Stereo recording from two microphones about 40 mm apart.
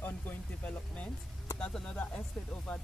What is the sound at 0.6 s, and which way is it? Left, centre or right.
Speech, left.